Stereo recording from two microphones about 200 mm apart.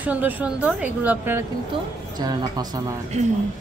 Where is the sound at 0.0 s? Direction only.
10° right (ahead or behind).